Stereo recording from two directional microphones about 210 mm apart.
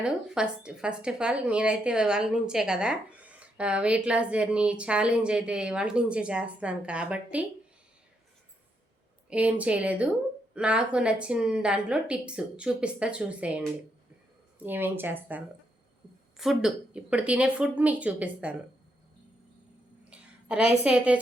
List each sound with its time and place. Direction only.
0.0 s a woman's voice: 5° right (ahead or behind)
9.3 s a woman's voice: 5° right (ahead or behind)
20.1 s a sound: 5° right (ahead or behind)
20.8 s a woman's voice: 5° right (ahead or behind)